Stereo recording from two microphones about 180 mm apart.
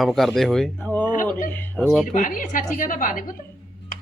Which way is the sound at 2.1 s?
50° left (ahead or behind).